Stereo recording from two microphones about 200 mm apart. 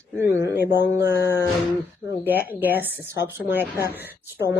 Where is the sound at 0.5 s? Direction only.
55° left (ahead or behind).